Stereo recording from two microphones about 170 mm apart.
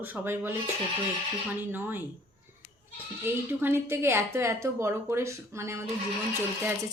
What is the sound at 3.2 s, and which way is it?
Speech, 10° right (ahead or behind).